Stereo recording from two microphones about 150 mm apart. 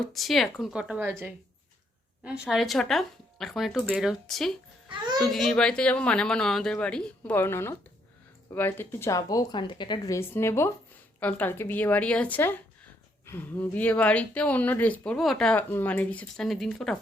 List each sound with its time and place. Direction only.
0.1 s speech: centre (ahead or behind)
2.2 s speech: 5° right (ahead or behind)
4.9 s a child's voice: 30° right (ahead or behind)
5.2 s speech: centre (ahead or behind); by 10.2 s 30° left (ahead or behind)
10.2 s speech: 15° left (ahead or behind)